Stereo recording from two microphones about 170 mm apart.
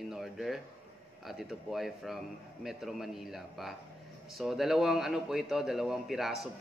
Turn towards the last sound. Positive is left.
turn(degrees=0)  # may be behind; listen again after turning